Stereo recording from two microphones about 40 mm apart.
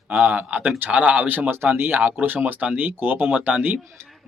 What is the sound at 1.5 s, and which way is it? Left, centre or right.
Speech, right.